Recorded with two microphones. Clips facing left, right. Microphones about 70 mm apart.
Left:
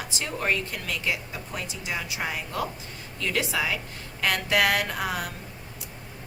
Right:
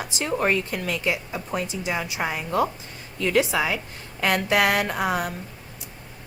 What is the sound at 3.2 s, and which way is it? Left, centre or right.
A woman's voice, right.